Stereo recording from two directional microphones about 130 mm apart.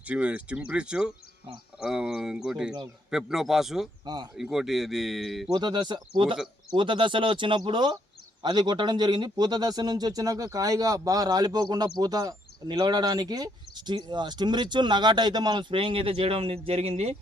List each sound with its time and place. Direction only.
0.0 s speech: 10° right (ahead or behind)
4.0 s speech: 30° right (ahead or behind)
4.5 s speech: 5° right (ahead or behind)
5.5 s speech: 35° right (ahead or behind); by 17.2 s 55° right (ahead or behind)